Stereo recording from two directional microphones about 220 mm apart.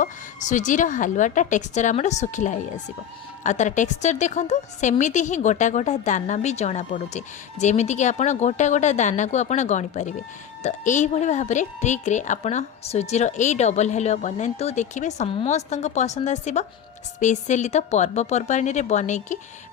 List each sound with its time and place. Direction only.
0.0 s a woman's voice: 35° left (ahead or behind)